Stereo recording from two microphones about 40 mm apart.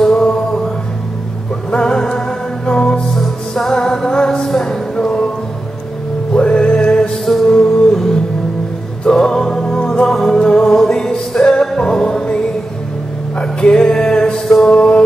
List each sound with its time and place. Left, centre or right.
0.0 s music: centre
1.7 s music: centre
6.3 s music: left
7.9 s music: centre
13.4 s music: left